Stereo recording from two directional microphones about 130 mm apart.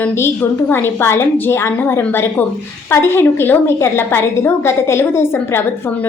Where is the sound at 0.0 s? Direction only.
15° left (ahead or behind).